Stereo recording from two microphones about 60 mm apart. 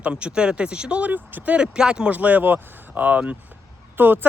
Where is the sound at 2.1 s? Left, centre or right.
Right.